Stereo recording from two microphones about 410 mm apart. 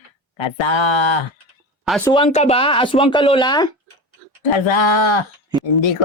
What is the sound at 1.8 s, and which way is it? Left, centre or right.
Speech, centre.